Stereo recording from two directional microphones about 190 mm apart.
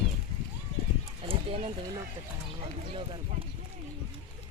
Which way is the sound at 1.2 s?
30° right (ahead or behind).